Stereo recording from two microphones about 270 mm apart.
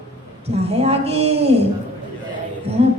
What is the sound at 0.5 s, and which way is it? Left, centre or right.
Speech, right.